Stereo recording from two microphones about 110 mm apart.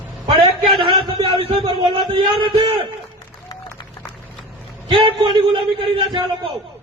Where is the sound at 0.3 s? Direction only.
55° right (ahead or behind).